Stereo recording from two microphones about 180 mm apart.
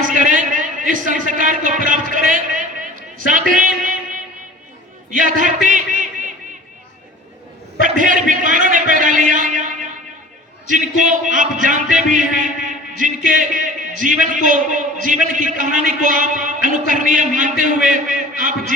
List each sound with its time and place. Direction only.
0.0 s a man's voice: 45° right (ahead or behind)
3.2 s a sound: 45° right (ahead or behind)
5.1 s speech: 45° right (ahead or behind)
7.9 s a man's voice: 45° right (ahead or behind)
10.7 s a man's voice: 45° right (ahead or behind)